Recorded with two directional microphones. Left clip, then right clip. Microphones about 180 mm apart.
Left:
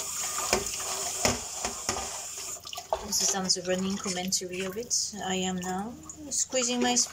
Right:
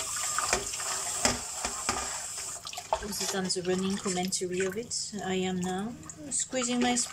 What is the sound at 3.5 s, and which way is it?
Speech, 20° right (ahead or behind).